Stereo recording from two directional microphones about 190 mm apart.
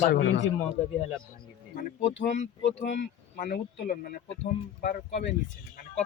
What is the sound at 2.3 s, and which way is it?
Speech, 40° left (ahead or behind).